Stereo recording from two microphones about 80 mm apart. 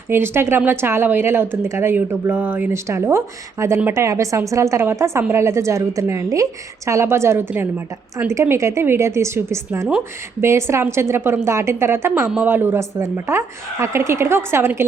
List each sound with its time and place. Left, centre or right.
0.1 s a woman's voice: right
2.9 s a woman's voice: right
8.4 s a woman's voice: right